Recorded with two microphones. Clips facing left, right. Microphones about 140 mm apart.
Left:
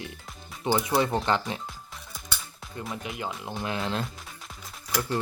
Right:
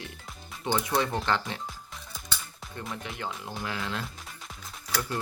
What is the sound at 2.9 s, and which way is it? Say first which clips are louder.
Speech: left 2 dB; 15° left (ahead or behind).